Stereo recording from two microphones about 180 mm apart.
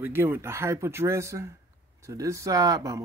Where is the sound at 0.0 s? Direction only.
10° right (ahead or behind).